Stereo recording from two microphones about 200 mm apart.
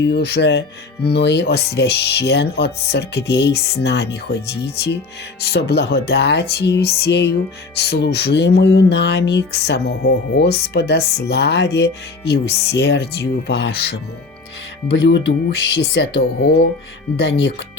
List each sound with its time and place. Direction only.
0.1 s music: 55° left (ahead or behind)